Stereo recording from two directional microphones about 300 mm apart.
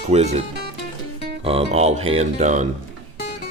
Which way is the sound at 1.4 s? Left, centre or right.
Centre.